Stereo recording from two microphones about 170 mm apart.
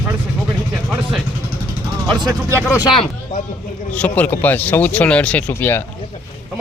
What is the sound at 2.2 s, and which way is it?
Speech, 20° right (ahead or behind).